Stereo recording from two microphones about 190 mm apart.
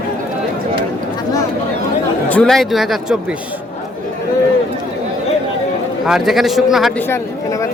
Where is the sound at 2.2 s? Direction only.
5° left (ahead or behind).